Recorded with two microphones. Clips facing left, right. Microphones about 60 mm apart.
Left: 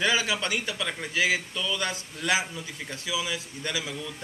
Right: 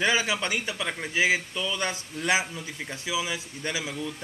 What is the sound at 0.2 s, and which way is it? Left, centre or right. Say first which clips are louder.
A man's voice: right 1 dB; centre.